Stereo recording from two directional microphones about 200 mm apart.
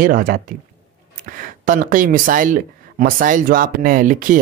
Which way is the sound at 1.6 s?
40° right (ahead or behind).